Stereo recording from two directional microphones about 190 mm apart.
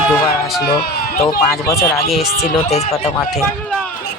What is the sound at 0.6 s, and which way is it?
Speech, 55° left (ahead or behind).